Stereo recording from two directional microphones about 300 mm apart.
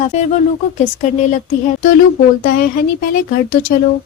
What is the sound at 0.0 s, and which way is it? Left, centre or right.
Speech, left.